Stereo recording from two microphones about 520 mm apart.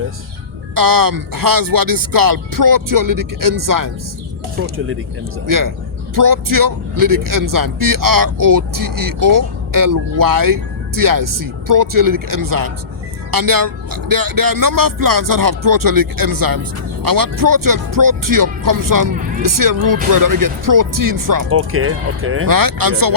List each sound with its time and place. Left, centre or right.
0.7 s speech: right
5.5 s speech: right
21.5 s speech: right
22.4 s speech: right